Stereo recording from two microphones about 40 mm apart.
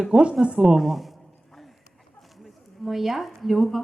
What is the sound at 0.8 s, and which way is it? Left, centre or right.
Speech, centre.